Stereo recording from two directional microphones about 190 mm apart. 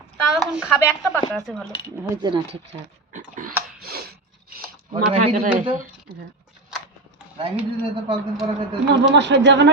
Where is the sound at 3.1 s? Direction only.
45° right (ahead or behind).